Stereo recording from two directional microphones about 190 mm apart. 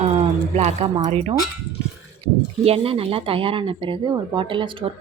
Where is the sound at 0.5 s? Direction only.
35° right (ahead or behind).